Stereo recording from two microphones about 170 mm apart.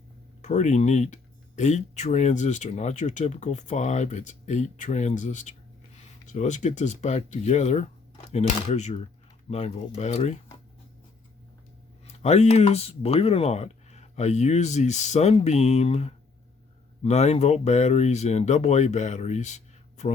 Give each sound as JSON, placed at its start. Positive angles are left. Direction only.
{"t": 0.4, "sound": "speech", "side_deg": 45}
{"t": 12.0, "sound": "speech", "side_deg": 40}